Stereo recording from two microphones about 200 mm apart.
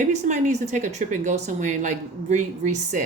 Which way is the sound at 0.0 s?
35° right (ahead or behind).